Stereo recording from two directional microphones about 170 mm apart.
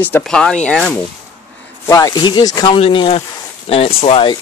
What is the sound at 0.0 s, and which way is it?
Speech, 5° left (ahead or behind).